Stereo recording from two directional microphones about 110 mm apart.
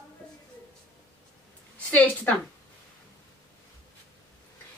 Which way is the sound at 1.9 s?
10° left (ahead or behind).